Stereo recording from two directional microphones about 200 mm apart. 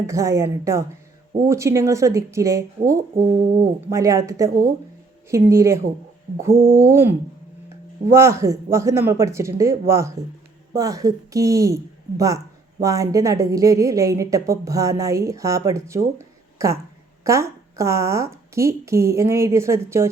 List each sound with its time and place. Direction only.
0.1 s a woman's voice: 15° right (ahead or behind)